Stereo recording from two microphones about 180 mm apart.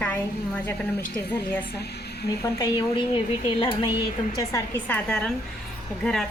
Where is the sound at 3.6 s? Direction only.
30° left (ahead or behind).